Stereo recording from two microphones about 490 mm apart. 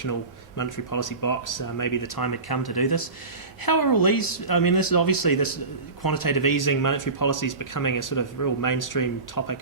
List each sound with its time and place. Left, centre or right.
0.0 s a man's voice: left